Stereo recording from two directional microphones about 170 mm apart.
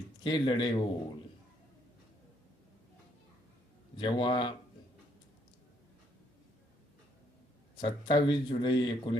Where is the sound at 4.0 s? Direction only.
30° left (ahead or behind).